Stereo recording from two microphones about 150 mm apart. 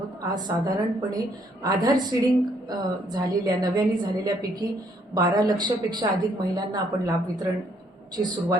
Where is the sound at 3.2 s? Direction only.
25° right (ahead or behind).